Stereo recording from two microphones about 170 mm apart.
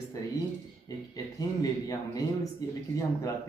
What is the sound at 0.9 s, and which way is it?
Speech, 20° left (ahead or behind).